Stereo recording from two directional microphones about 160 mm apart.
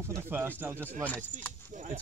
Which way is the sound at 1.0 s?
10° left (ahead or behind).